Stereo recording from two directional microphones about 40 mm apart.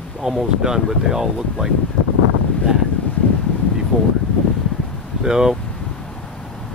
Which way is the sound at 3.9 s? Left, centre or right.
Right.